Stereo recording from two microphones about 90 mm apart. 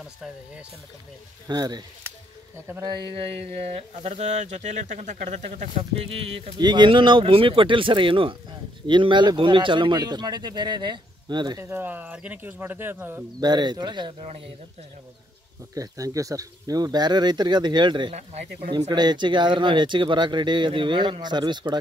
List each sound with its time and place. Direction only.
1.5 s speech: 50° right (ahead or behind)
2.8 s mantra: 55° right (ahead or behind); by 4.1 s 90° right
6.0 s mantra: 90° right
6.6 s speech: 55° right (ahead or behind)
11.7 s speech: 20° right (ahead or behind)
13.4 s speech: 55° right (ahead or behind)
15.7 s speech: 40° right (ahead or behind); by 21.7 s 55° right (ahead or behind)